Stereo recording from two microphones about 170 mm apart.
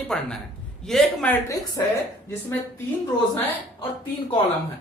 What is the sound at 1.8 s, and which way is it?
Speech, 25° left (ahead or behind).